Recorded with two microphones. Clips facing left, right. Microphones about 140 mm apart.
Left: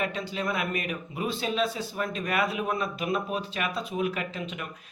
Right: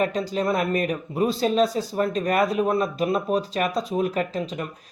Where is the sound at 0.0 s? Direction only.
40° right (ahead or behind).